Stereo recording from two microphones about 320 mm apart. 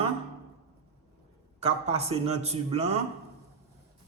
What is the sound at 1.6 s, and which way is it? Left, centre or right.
A man's voice, centre.